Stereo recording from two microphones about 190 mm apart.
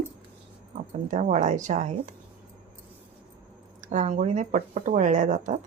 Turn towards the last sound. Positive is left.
turn(degrees=-40)  # may be behind; listen again after turning